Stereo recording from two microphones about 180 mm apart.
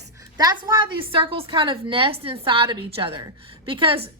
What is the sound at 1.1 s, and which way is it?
A woman's voice, 30° right (ahead or behind).